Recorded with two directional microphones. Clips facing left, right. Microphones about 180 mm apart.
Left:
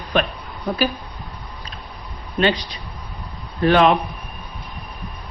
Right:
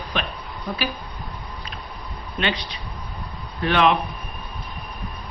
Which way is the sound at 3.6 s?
40° left (ahead or behind).